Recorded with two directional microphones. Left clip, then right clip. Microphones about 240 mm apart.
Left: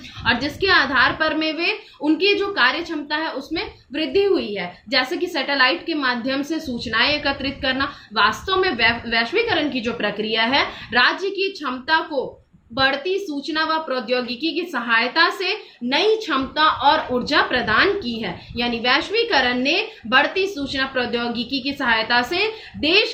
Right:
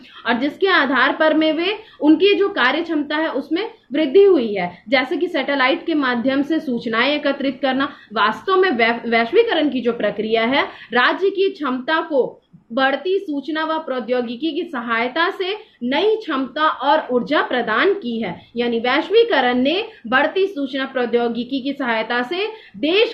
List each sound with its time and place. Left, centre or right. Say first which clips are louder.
0.3 s a woman's voice: right 1 dB; centre